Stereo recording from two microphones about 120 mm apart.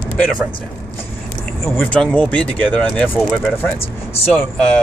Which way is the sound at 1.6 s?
15° left (ahead or behind).